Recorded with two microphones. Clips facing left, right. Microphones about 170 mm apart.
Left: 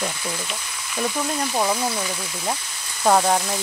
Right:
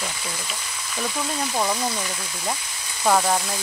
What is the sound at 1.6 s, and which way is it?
Frying, 10° left (ahead or behind).